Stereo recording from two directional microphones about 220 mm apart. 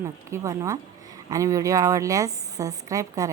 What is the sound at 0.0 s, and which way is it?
A woman's voice, 15° right (ahead or behind).